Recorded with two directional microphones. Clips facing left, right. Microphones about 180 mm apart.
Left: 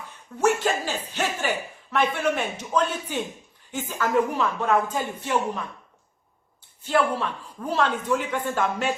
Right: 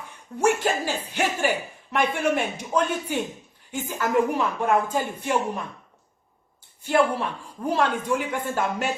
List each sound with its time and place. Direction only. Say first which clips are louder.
0.4 s speech: even; 10° right (ahead or behind)
6.8 s speech: right 1 dB; 10° right (ahead or behind)